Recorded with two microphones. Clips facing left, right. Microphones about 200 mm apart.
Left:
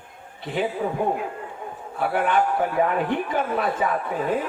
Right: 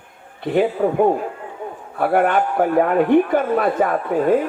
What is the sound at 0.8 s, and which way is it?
Speech, 60° right (ahead or behind).